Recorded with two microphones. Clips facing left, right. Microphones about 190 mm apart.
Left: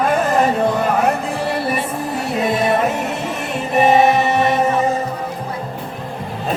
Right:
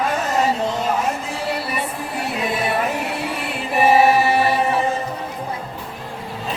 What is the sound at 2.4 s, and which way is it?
Music, 40° left (ahead or behind).